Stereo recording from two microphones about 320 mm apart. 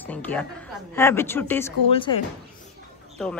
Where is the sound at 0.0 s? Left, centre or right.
Centre.